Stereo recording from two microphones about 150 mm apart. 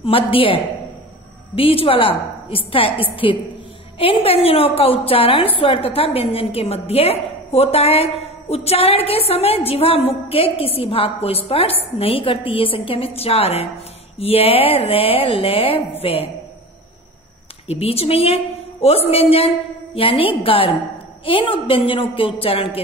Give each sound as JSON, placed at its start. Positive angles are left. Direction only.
{"t": 0.0, "sound": "a woman's voice", "side_deg": 35}
{"t": 17.6, "sound": "a woman's voice", "side_deg": 40}